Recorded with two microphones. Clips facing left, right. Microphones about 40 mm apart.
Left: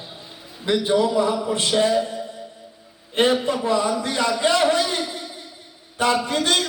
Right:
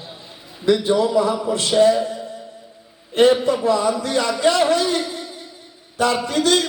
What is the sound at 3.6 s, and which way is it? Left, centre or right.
A man's voice, left.